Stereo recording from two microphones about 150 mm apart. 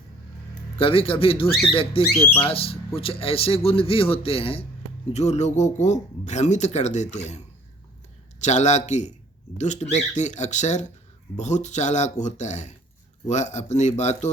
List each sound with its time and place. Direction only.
0.8 s speech: 35° left (ahead or behind)
2.1 s speech: 5° left (ahead or behind)
2.4 s speech: 40° left (ahead or behind)